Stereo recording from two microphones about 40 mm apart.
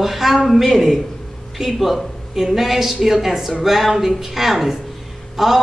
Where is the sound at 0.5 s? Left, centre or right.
Centre.